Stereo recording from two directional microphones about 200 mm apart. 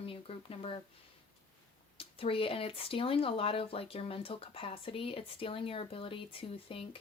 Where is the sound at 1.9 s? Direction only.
25° left (ahead or behind).